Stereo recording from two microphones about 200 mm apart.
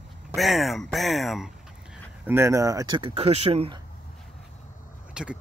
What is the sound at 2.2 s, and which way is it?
Speech, 10° right (ahead or behind).